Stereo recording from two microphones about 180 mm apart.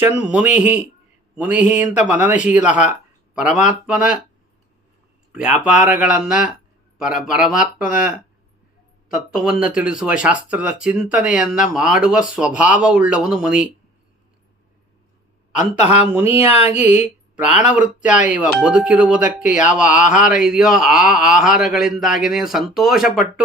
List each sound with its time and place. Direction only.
0.2 s speech: 5° right (ahead or behind)
5.4 s speech: 5° right (ahead or behind)
9.3 s speech: 5° right (ahead or behind)
15.5 s speech: 40° left (ahead or behind)
17.6 s speech: 5° right (ahead or behind)
19.9 s speech: 45° left (ahead or behind)
20.2 s speech: 5° right (ahead or behind)